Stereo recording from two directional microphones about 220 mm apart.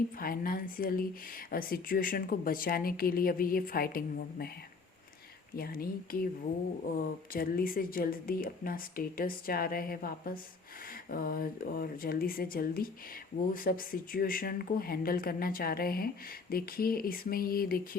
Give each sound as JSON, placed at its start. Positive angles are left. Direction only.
{"t": 0.2, "sound": "speech", "side_deg": 40}
{"t": 5.5, "sound": "speech", "side_deg": 45}